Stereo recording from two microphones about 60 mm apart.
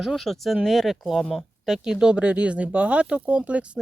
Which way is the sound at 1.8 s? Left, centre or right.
Centre.